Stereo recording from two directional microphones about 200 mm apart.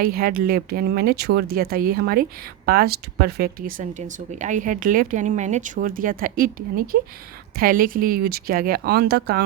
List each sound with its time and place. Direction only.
0.0 s speech: 45° right (ahead or behind)